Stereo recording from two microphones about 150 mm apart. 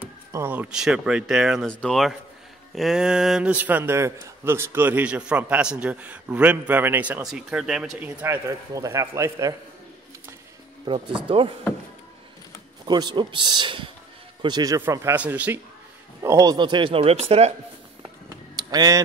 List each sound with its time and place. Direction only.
0.0 s a man's voice: 15° right (ahead or behind)
8.5 s a man's voice: 20° right (ahead or behind)
10.9 s a man's voice: 30° right (ahead or behind)
12.8 s a man's voice: 30° right (ahead or behind); by 15.6 s 10° right (ahead or behind)
16.2 s a man's voice: 20° right (ahead or behind); by 17.6 s 45° right (ahead or behind)
18.6 s speech: 25° right (ahead or behind)